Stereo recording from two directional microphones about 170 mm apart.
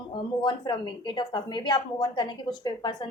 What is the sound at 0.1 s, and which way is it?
A woman's voice, 25° left (ahead or behind).